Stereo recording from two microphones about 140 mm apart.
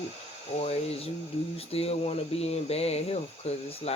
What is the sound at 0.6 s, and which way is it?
Speech, 45° left (ahead or behind).